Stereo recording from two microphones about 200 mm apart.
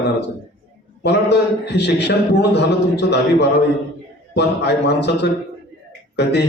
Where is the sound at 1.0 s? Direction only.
60° left (ahead or behind).